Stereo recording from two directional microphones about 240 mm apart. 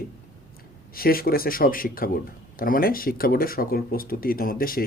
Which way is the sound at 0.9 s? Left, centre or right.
Left.